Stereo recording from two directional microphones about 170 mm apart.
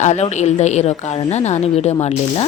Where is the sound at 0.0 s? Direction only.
40° left (ahead or behind).